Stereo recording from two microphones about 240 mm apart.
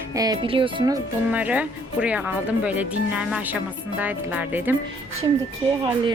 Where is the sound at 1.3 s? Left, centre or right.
Centre.